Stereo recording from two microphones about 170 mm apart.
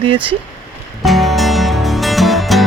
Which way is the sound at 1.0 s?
Centre (ahead or behind).